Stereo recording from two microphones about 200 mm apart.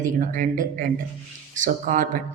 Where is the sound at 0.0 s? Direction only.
40° right (ahead or behind).